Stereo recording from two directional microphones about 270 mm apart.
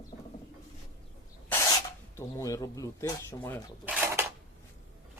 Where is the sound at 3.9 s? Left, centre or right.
Centre.